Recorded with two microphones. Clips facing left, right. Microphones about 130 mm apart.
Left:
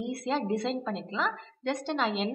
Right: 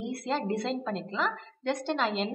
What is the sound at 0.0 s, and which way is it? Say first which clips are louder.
A woman's voice: left 1 dB; centre (ahead or behind).